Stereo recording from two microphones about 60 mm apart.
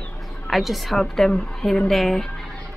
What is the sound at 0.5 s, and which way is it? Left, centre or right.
Speech, centre.